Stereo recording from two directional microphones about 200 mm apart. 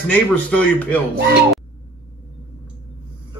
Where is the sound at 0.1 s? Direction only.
5° left (ahead or behind).